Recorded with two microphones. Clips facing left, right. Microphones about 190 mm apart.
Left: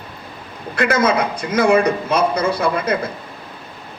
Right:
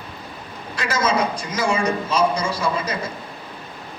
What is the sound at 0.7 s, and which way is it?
A man's voice, 60° left (ahead or behind).